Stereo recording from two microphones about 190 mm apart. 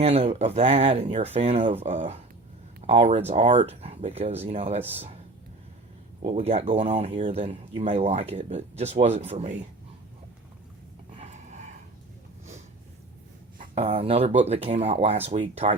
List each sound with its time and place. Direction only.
0.0 s speech: 35° right (ahead or behind)
6.4 s speech: 30° right (ahead or behind)
11.2 s a sound: 35° right (ahead or behind)
13.7 s speech: 30° right (ahead or behind)